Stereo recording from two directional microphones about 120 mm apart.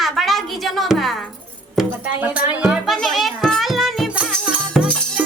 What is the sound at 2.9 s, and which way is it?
Music, centre (ahead or behind).